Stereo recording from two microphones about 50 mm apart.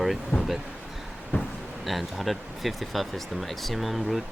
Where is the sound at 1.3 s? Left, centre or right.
Left.